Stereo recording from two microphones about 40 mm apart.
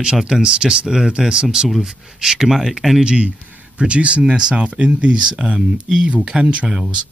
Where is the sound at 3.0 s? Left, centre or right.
Right.